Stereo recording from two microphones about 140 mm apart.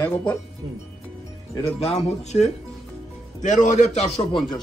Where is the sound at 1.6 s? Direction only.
50° left (ahead or behind).